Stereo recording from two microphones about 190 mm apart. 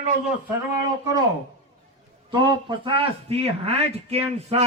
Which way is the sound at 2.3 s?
25° right (ahead or behind).